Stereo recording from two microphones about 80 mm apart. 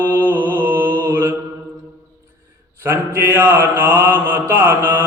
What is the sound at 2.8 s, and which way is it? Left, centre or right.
Mantra, right.